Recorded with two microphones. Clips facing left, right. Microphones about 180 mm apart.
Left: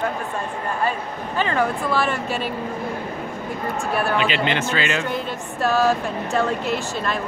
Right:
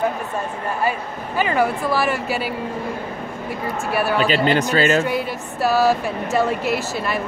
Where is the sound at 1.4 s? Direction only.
10° right (ahead or behind).